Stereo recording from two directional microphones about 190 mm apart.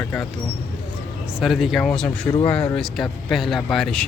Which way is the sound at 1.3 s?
5° right (ahead or behind).